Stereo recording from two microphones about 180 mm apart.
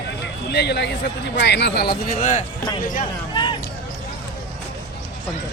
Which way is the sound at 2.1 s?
45° left (ahead or behind).